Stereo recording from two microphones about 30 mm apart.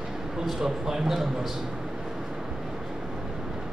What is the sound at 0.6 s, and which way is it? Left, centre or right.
Speech, centre.